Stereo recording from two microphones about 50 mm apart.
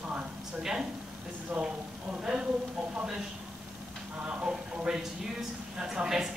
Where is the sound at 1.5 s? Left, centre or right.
Centre.